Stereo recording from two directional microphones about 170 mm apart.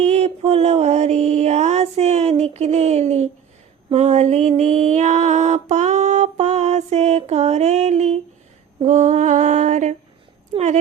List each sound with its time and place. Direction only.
0.1 s music: 40° right (ahead or behind)
3.9 s mantra: 40° right (ahead or behind)
10.5 s a sound: 45° right (ahead or behind)